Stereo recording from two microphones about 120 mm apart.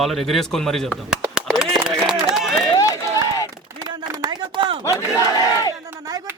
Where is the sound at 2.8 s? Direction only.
30° left (ahead or behind).